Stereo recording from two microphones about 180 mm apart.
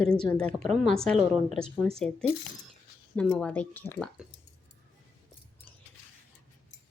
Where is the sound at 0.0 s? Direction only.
5° left (ahead or behind).